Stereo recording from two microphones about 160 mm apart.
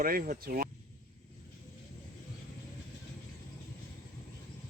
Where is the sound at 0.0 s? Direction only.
60° right (ahead or behind).